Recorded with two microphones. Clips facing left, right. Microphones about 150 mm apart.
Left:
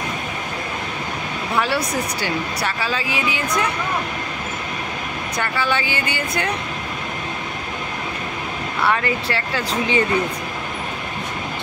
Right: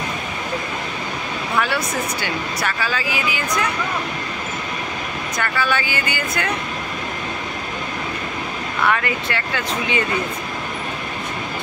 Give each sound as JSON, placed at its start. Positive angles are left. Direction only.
{"t": 2.2, "sound": "speech", "side_deg": 30}
{"t": 5.4, "sound": "speech", "side_deg": 25}
{"t": 8.8, "sound": "speech", "side_deg": 30}